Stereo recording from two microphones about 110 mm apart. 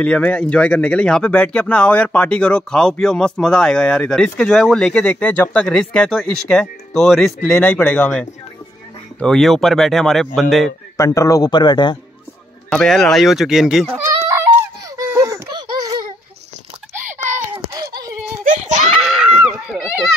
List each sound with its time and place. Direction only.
0.0 s speech: 10° left (ahead or behind)
11.1 s speech: 30° left (ahead or behind)
12.8 s speech: centre (ahead or behind)
14.2 s a sound: 25° right (ahead or behind)
15.1 s baby laughter: 30° right (ahead or behind)
15.5 s baby laughter: 40° right (ahead or behind)
17.7 s a sound: 35° right (ahead or behind)
18.6 s screaming: 90° right
18.9 s a sound: 5° right (ahead or behind)